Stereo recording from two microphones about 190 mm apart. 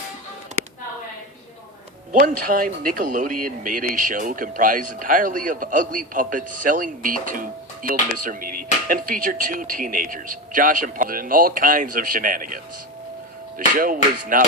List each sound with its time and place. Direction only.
2.1 s speech: 50° right (ahead or behind)
13.7 s speech: 45° right (ahead or behind)